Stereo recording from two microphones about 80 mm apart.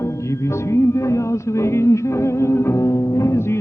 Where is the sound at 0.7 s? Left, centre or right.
Left.